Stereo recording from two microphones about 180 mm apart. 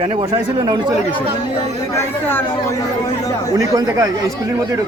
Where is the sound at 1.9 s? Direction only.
10° left (ahead or behind).